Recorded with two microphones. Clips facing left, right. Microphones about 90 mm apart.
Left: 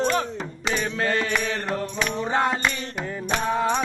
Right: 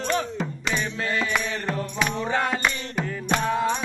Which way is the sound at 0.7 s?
50° left (ahead or behind).